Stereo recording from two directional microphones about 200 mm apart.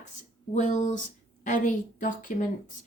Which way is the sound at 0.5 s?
35° left (ahead or behind).